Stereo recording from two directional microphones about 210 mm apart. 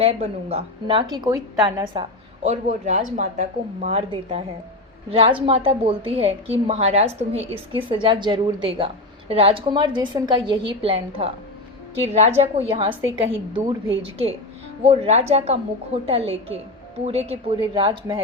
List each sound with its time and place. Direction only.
0.0 s a woman's voice: 30° right (ahead or behind)
14.8 s a woman's voice: 30° right (ahead or behind)